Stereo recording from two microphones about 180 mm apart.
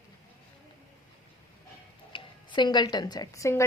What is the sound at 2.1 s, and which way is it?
Speech, 25° left (ahead or behind).